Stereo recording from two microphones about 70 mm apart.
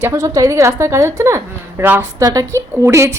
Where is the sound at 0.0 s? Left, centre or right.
Right.